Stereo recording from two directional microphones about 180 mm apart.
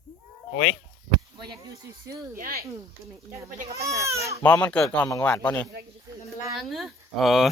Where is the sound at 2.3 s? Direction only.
55° right (ahead or behind).